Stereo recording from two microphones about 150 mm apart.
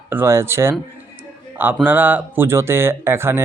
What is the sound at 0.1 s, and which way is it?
Speech, 15° right (ahead or behind).